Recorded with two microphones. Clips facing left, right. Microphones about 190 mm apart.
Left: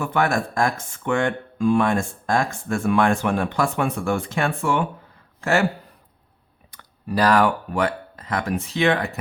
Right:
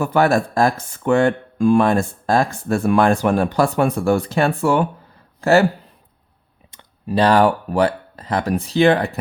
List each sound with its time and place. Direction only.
0.0 s speech: 35° right (ahead or behind)
6.7 s speech: 25° right (ahead or behind)